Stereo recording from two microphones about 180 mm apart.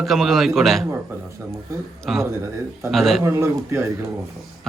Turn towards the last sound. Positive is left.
turn(degrees=-15)  # may be behind; listen again after turning